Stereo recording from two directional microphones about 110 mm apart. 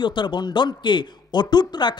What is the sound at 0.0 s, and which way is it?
A man's voice, 45° left (ahead or behind).